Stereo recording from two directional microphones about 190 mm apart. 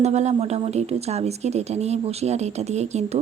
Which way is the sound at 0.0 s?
35° right (ahead or behind).